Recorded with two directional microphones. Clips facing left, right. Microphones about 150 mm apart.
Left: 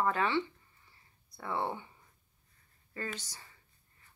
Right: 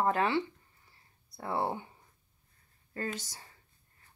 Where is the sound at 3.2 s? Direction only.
40° right (ahead or behind).